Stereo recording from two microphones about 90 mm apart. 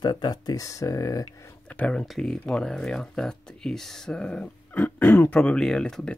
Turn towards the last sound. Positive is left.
turn(degrees=10)  # may be behind; listen again after turning